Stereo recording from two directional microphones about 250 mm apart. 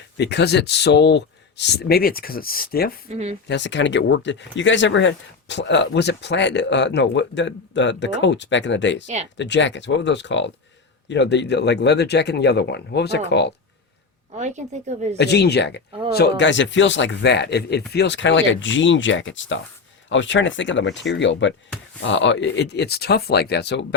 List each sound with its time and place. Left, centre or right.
0.2 s speech: left
3.1 s a woman's voice: right
3.4 s speech: left
14.3 s a woman's voice: right
15.2 s speech: left